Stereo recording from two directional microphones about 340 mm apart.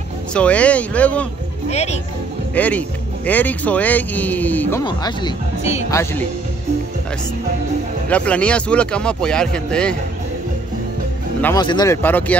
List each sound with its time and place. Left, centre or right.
0.3 s speech: centre
1.7 s speech: centre
2.5 s speech: centre
8.1 s speech: centre
11.4 s speech: centre